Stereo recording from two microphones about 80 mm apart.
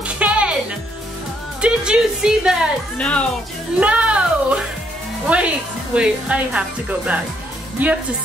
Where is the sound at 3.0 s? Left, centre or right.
Centre.